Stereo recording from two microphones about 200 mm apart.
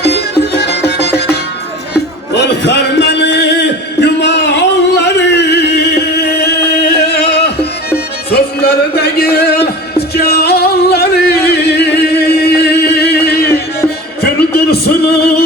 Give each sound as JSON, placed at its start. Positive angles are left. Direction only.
{"t": 0.0, "sound": "music", "side_deg": 55}
{"t": 2.3, "sound": "a sound", "side_deg": 60}
{"t": 8.3, "sound": "music", "side_deg": 55}